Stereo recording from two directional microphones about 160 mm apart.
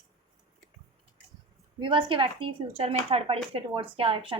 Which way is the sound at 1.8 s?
30° right (ahead or behind).